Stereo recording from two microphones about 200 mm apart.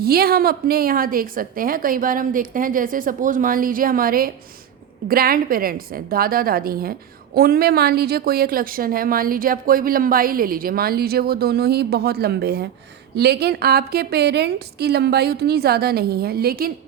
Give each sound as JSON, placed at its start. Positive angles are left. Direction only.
{"t": 0.0, "sound": "speech", "side_deg": -50}